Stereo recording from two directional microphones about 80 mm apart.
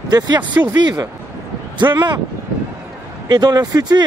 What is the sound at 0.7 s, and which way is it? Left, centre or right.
Speech, right.